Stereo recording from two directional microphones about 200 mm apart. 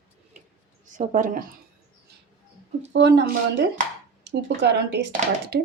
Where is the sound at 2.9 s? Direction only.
60° right (ahead or behind).